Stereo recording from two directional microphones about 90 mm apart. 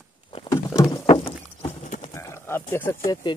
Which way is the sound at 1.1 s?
75° left (ahead or behind).